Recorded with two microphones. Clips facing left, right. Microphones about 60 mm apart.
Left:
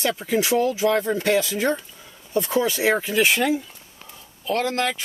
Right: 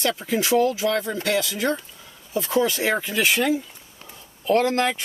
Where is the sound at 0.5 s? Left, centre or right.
Centre.